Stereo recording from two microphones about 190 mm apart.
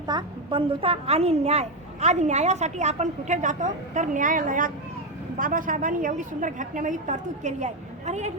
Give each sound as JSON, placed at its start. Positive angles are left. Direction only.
{"t": 0.1, "sound": "a woman's voice", "side_deg": -25}